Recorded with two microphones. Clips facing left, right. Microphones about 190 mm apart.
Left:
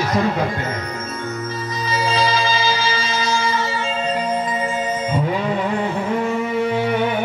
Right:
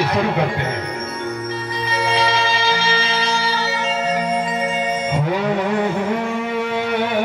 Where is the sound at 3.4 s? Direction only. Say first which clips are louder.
Even; 70° right (ahead or behind).